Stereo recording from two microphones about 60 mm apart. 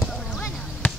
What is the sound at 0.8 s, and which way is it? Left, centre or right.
Basketball bounce, left.